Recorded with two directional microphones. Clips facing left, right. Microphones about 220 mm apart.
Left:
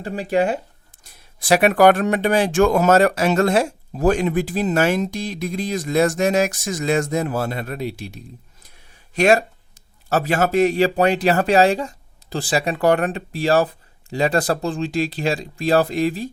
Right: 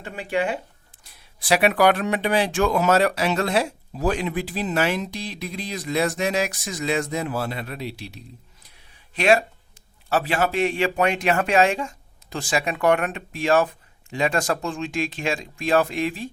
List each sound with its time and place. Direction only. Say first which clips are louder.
0.0 s a man's voice: left 5 dB; 35° left (ahead or behind)